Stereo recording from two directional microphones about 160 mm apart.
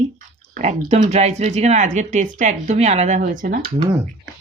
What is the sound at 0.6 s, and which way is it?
Speech, 45° right (ahead or behind).